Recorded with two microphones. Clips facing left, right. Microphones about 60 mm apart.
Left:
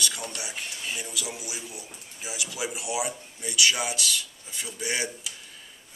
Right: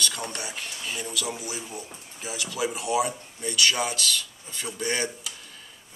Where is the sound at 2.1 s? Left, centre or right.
Centre.